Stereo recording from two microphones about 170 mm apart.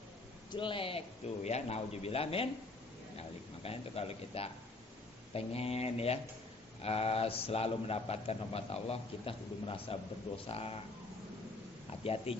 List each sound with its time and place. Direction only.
0.5 s a man's voice: 30° left (ahead or behind)
12.0 s a man's voice: 35° left (ahead or behind)